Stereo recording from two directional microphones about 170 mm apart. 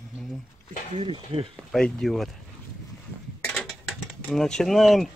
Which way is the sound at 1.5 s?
Centre (ahead or behind).